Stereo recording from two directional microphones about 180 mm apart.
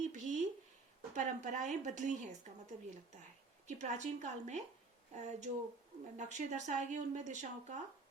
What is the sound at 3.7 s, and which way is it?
Speech, 40° right (ahead or behind).